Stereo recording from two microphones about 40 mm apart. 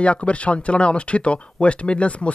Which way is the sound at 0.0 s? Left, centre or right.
Left.